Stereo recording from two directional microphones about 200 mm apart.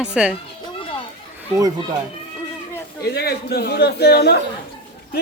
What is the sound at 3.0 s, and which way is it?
A man's voice, 55° left (ahead or behind).